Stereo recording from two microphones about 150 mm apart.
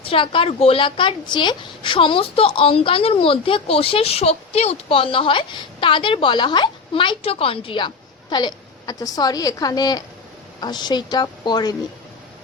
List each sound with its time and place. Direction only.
0.0 s a woman's voice: 35° left (ahead or behind)